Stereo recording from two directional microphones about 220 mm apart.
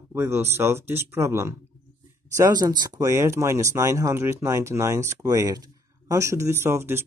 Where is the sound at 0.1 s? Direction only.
10° right (ahead or behind).